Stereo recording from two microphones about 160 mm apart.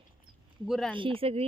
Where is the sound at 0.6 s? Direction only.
Centre (ahead or behind).